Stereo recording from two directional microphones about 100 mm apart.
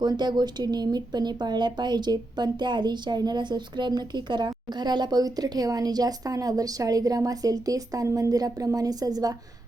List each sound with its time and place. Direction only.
0.0 s speech: 45° right (ahead or behind)